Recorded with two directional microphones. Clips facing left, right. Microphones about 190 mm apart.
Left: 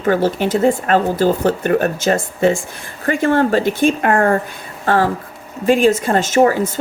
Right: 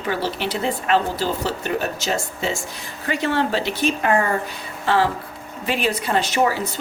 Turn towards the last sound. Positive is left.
turn(degrees=50)  # may be behind; listen again after turning